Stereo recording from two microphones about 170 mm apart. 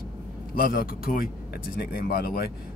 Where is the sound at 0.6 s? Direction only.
55° left (ahead or behind).